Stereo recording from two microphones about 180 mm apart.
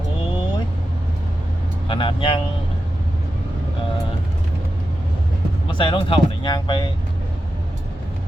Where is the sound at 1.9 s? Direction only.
30° left (ahead or behind).